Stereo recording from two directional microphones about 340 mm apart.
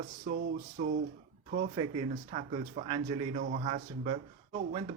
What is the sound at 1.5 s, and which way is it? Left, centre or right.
Speech, centre.